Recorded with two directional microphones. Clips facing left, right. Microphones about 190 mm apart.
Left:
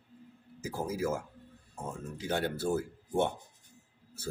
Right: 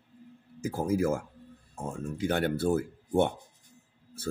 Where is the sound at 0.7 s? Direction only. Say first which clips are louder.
Right 5 dB; 50° right (ahead or behind).